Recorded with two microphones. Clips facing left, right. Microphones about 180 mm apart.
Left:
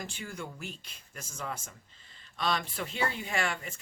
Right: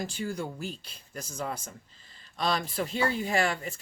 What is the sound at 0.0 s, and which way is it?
Speech, 35° right (ahead or behind).